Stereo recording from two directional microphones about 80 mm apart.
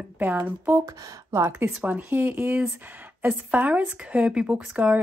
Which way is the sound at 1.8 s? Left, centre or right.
Right.